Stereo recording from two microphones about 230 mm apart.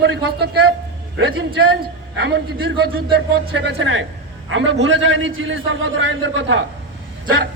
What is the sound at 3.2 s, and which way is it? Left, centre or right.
A man's voice, right.